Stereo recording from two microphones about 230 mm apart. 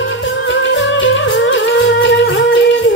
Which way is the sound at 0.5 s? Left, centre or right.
Left.